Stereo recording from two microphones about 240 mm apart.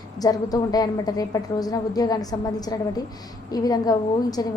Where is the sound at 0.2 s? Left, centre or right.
Centre.